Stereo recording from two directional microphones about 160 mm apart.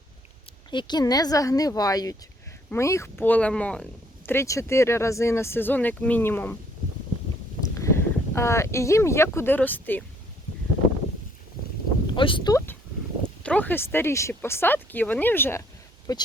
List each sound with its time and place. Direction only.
0.7 s speech: 30° left (ahead or behind); by 3.8 s 5° left (ahead or behind)
4.3 s speech: 15° left (ahead or behind)
7.6 s speech: 20° left (ahead or behind)
12.1 s speech: 30° left (ahead or behind)
13.4 s speech: 10° left (ahead or behind)
16.1 s speech: 25° left (ahead or behind)